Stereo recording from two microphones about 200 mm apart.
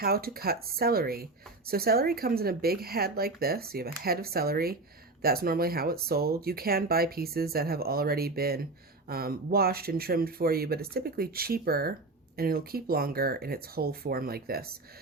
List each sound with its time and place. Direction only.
0.0 s speech: 50° right (ahead or behind)